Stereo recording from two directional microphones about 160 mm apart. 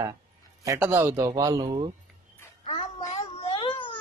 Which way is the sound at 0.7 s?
15° right (ahead or behind).